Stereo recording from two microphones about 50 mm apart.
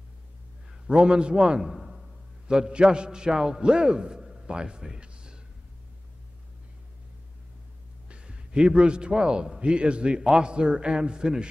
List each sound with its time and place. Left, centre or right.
0.8 s a man's voice: centre
1.6 s a man's voice: centre
8.1 s a man's voice: right